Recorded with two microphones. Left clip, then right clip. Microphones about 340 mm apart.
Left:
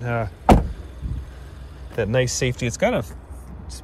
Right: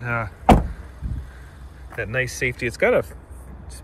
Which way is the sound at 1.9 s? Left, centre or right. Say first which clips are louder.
Left 3 dB; centre.